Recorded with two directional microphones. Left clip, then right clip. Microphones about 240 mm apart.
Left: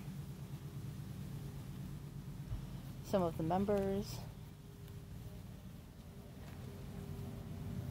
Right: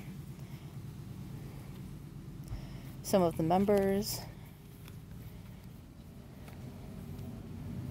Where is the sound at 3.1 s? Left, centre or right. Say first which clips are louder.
Right 7 dB; right.